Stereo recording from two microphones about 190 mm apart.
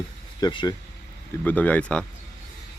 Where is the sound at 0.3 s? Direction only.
20° left (ahead or behind).